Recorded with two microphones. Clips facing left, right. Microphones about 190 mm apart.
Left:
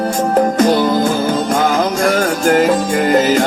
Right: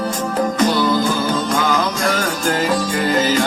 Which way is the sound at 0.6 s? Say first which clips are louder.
Left 4 dB; 50° left (ahead or behind).